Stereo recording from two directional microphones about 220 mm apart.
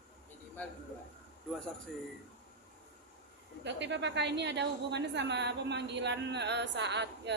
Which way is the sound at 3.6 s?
50° right (ahead or behind).